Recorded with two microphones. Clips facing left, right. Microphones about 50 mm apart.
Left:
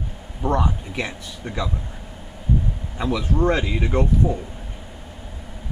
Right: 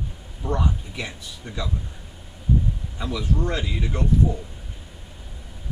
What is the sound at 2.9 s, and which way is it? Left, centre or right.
Speech, left.